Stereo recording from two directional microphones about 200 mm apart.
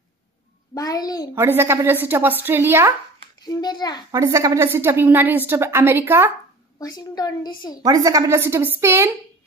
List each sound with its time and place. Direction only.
0.7 s a woman's voice: 20° left (ahead or behind)
1.3 s a woman's voice: 10° right (ahead or behind)
3.4 s a woman's voice: 20° left (ahead or behind)
4.1 s a woman's voice: 15° right (ahead or behind)
6.8 s a woman's voice: 20° left (ahead or behind)
7.8 s a woman's voice: 15° right (ahead or behind)